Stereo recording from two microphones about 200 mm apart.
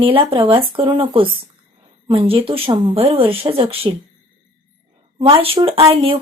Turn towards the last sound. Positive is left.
turn(degrees=-30)  # may be behind; listen again after turning